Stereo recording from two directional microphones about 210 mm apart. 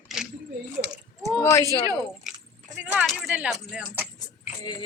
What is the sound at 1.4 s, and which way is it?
Speech, 15° left (ahead or behind).